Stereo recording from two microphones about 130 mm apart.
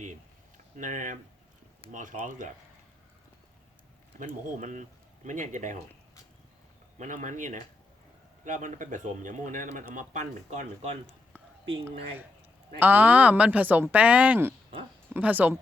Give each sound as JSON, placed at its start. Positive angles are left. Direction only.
{"t": 0.0, "sound": "a sound", "side_deg": -70}
{"t": 1.9, "sound": "speech", "side_deg": -85}
{"t": 4.2, "sound": "speech", "side_deg": -70}
{"t": 7.0, "sound": "speech", "side_deg": -75}
{"t": 12.8, "sound": "a woman's voice", "side_deg": -15}